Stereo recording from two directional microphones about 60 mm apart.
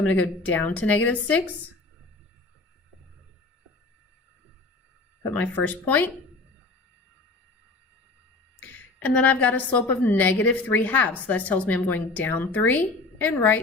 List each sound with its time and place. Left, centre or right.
0.0 s a woman's voice: left
5.3 s a woman's voice: left
8.6 s a woman's voice: left